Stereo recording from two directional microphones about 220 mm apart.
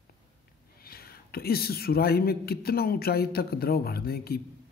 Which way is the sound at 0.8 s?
45° left (ahead or behind).